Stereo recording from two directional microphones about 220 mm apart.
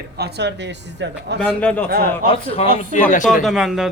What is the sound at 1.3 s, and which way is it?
Speech, 5° left (ahead or behind).